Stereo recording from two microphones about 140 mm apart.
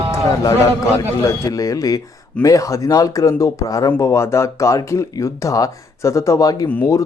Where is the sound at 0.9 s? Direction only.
25° left (ahead or behind).